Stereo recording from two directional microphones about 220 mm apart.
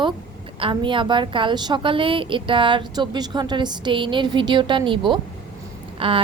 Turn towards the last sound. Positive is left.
turn(degrees=-25)  # may be behind; listen again after turning